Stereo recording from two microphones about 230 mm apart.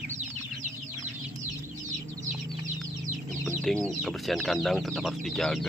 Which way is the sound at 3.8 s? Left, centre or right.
Centre.